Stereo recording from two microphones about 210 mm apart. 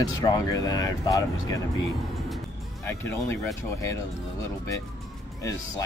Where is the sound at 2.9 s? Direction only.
15° left (ahead or behind).